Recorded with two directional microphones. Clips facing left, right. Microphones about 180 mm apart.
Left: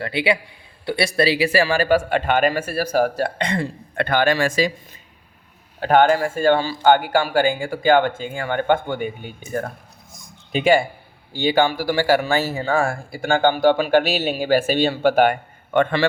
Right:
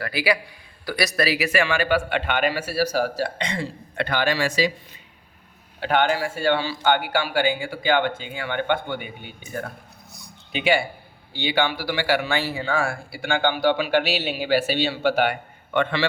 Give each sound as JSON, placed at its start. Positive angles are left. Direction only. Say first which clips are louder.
{"t": 0.0, "sound": "a man's voice", "louder": "left 2 dB", "side_deg": 25}
{"t": 5.8, "sound": "a man's voice", "louder": "left 6 dB", "side_deg": 45}
{"t": 10.1, "sound": "a sound", "louder": "left 7 dB", "side_deg": 45}
{"t": 11.3, "sound": "a man's voice", "louder": "left 5 dB", "side_deg": 45}